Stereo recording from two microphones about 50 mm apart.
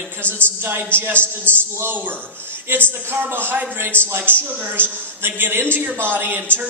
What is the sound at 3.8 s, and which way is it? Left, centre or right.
Speech, right.